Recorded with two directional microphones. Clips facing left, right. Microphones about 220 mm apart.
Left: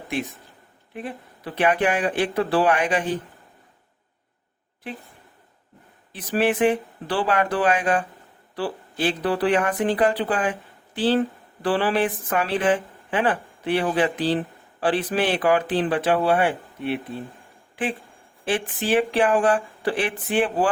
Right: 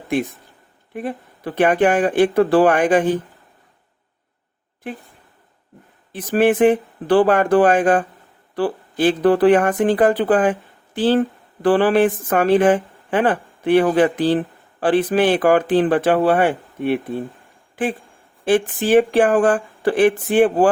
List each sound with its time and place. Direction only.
0.9 s speech: 50° right (ahead or behind)
6.1 s speech: 50° right (ahead or behind)
18.4 s speech: 45° right (ahead or behind)